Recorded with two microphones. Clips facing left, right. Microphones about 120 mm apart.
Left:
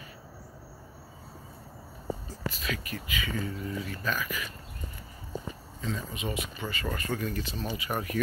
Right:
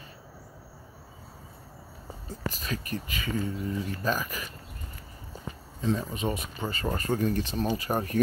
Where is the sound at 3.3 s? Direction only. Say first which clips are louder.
Right 6 dB; 25° right (ahead or behind).